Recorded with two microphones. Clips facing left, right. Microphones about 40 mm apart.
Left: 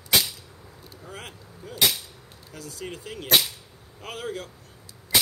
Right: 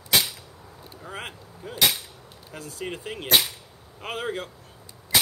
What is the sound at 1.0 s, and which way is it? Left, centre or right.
Speech, right.